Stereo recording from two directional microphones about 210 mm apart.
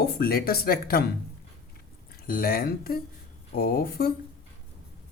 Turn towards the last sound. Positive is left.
turn(degrees=45)  # may be behind; listen again after turning